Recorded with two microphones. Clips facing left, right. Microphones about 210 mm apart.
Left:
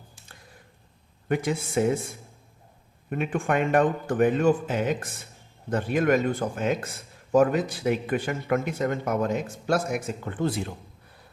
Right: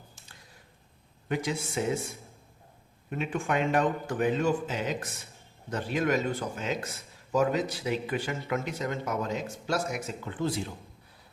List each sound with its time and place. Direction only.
1.3 s speech: 55° left (ahead or behind)
3.1 s speech: 55° left (ahead or behind)